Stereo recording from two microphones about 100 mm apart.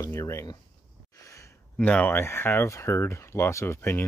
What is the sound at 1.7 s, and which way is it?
Speech, 10° left (ahead or behind).